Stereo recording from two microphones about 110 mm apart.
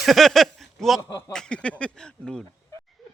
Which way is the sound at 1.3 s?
5° left (ahead or behind).